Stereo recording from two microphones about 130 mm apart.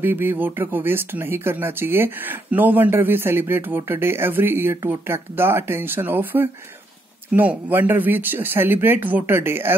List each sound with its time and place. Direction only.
0.0 s speech: 15° right (ahead or behind)